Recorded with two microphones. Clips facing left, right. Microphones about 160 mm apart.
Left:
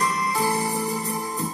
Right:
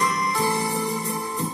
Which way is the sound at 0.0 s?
35° left (ahead or behind).